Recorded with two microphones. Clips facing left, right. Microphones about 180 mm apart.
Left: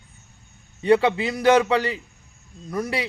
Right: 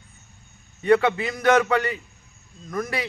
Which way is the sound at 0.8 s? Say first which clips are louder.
Left 1 dB; 30° left (ahead or behind).